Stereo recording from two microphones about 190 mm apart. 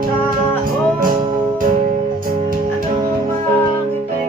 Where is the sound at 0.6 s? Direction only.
45° right (ahead or behind).